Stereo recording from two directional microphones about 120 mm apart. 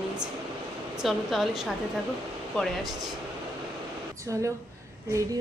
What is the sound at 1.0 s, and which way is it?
Speech, centre (ahead or behind).